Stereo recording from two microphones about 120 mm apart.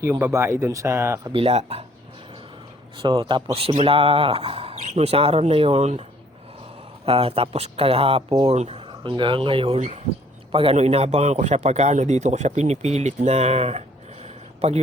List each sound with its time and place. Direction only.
0.0 s speech: 15° right (ahead or behind)
1.3 s speech: 50° right (ahead or behind)
3.0 s a man's voice: 40° right (ahead or behind); by 6.1 s 65° right (ahead or behind)
7.0 s a man's voice: 50° right (ahead or behind)